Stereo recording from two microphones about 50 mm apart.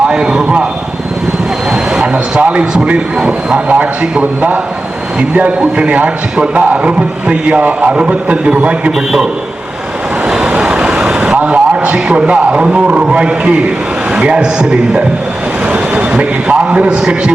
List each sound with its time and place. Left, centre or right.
0.1 s a man's voice: centre
1.7 s a sound: centre
2.8 s a man's voice: right
9.0 s a man's voice: centre
10.2 s vehicle: centre
11.4 s a man's voice: right
15.6 s a sound: right
17.0 s a man's voice: centre